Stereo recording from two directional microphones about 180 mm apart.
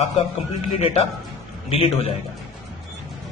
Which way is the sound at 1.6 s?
30° left (ahead or behind).